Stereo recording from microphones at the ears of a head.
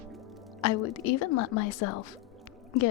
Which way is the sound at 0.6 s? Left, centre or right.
Left.